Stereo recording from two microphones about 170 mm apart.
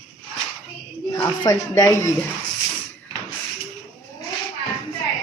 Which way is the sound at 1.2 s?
20° left (ahead or behind).